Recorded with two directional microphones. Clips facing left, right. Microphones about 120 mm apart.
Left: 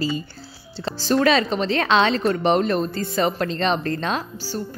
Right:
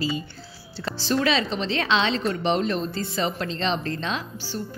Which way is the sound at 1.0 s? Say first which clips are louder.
Left 5 dB; 45° left (ahead or behind).